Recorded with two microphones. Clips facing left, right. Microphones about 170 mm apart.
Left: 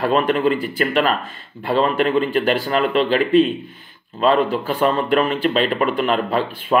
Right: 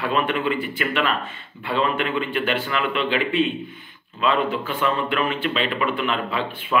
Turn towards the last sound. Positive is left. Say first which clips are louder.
# left 6 dB
turn(degrees=40)  # may be behind; listen again after turning